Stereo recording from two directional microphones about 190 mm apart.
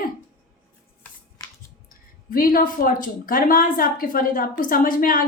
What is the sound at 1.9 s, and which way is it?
A woman's voice, 50° left (ahead or behind).